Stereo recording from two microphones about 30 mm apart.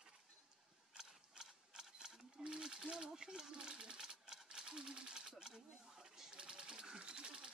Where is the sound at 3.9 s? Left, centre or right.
Right.